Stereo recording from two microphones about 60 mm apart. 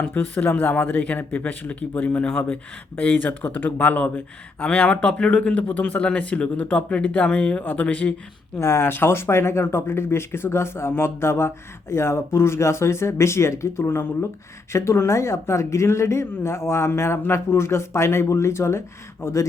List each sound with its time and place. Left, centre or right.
0.0 s speech: left
8.5 s speech: left
8.8 s speech: left